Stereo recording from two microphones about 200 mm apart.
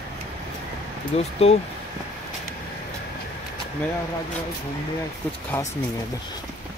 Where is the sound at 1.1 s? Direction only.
30° left (ahead or behind).